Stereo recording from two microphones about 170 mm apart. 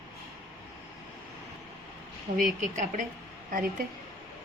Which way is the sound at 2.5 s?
45° right (ahead or behind).